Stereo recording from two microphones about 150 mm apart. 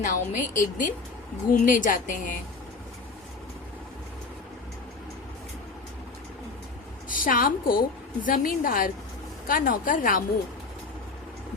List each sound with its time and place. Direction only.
0.0 s a woman's voice: 60° left (ahead or behind)
7.1 s a woman's voice: 70° left (ahead or behind)